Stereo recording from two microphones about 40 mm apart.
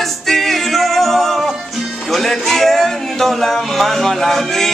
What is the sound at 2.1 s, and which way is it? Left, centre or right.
Speech, centre.